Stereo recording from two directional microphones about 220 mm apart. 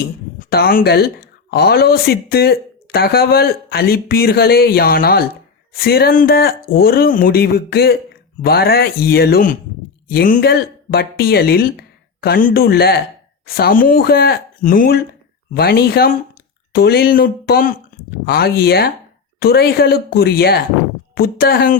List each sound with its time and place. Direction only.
0.3 s speech: 40° left (ahead or behind)